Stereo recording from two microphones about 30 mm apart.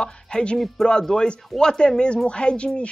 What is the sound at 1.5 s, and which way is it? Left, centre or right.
A woman's voice, left.